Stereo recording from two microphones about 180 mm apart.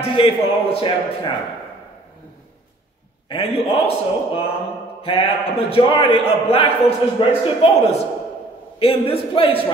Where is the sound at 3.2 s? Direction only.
30° left (ahead or behind).